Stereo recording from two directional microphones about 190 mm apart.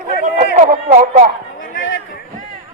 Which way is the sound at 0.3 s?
40° right (ahead or behind).